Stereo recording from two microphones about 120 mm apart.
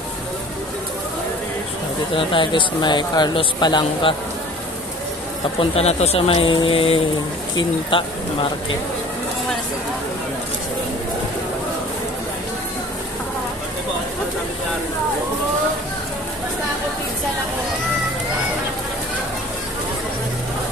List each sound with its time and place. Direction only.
2.1 s speech: 45° left (ahead or behind)
5.6 s speech: 60° left (ahead or behind); by 8.5 s 45° left (ahead or behind)